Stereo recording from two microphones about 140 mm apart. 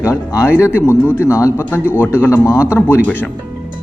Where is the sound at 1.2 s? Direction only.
20° left (ahead or behind).